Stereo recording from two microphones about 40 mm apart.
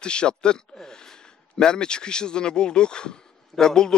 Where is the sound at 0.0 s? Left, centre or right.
Left.